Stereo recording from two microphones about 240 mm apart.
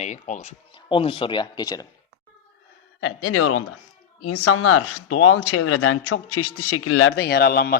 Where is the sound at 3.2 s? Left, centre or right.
Left.